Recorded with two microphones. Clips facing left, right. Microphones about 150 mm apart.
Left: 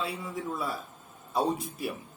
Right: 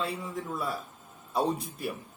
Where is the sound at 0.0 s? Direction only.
Centre (ahead or behind).